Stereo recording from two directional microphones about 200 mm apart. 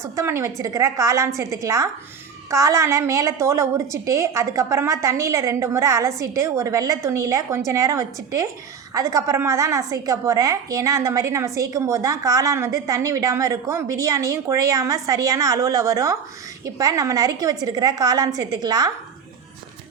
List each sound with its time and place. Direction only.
0.2 s a woman's voice: 15° right (ahead or behind)